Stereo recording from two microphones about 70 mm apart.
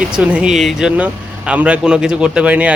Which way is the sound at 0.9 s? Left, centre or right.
Right.